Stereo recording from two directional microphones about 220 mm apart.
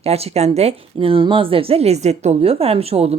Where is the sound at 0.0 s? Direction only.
30° right (ahead or behind).